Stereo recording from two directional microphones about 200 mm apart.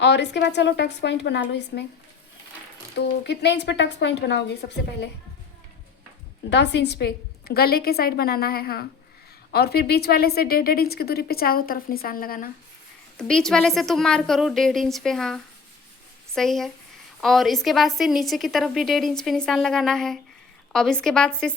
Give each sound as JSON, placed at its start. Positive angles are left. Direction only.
{"t": 0.0, "sound": "a woman's voice", "side_deg": 60}
{"t": 3.2, "sound": "a woman's voice", "side_deg": 55}
{"t": 6.5, "sound": "a woman's voice", "side_deg": 60}
{"t": 13.1, "sound": "a woman's voice", "side_deg": 5}